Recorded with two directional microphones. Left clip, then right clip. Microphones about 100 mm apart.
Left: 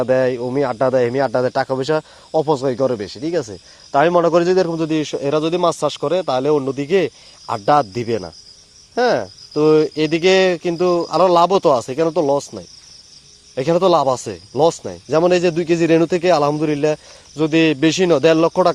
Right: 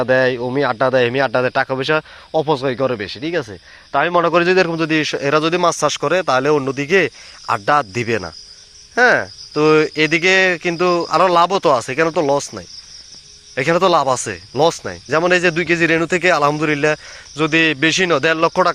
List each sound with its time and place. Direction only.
0.0 s speech: 15° left (ahead or behind)
1.5 s speech: 45° left (ahead or behind)
4.8 s speech: 25° left (ahead or behind); by 12.3 s 40° left (ahead or behind)
13.6 s speech: 45° left (ahead or behind)